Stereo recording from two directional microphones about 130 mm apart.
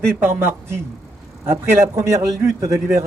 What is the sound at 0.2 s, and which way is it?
A man's voice, 20° right (ahead or behind).